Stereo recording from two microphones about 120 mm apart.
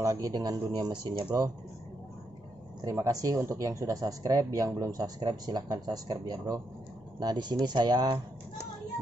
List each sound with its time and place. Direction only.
0.0 s speech: 30° right (ahead or behind)
2.8 s speech: 25° right (ahead or behind)